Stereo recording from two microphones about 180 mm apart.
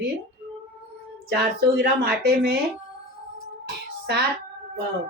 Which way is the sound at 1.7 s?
65° right (ahead or behind).